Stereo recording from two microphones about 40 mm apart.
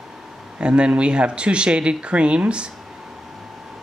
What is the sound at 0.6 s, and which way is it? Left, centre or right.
Speech, right.